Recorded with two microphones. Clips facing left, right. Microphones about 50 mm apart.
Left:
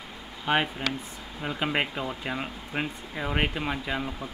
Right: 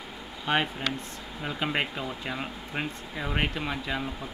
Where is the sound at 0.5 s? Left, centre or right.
Centre.